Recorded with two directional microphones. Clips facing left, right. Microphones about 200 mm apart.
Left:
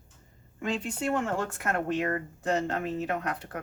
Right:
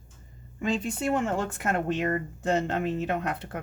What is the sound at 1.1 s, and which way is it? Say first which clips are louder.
Speech: right 2 dB; 20° right (ahead or behind).